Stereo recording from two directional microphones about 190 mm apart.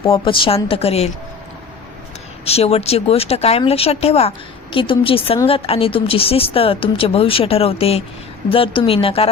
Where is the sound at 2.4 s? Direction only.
30° left (ahead or behind).